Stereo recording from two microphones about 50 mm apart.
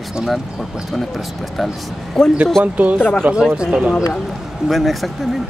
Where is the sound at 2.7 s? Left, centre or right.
Right.